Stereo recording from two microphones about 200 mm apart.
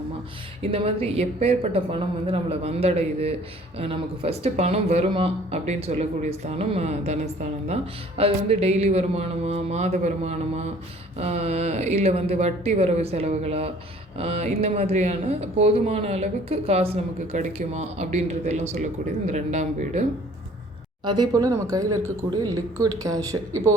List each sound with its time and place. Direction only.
0.7 s speech: 30° right (ahead or behind)
8.2 s speech: 30° right (ahead or behind)
21.0 s a woman's voice: 20° right (ahead or behind)